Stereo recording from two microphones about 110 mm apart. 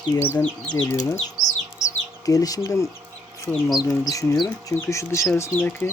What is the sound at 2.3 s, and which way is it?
Speech, 35° left (ahead or behind).